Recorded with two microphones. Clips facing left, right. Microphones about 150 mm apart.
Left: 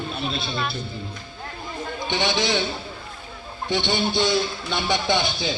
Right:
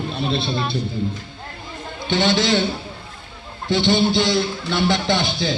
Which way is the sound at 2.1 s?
15° left (ahead or behind).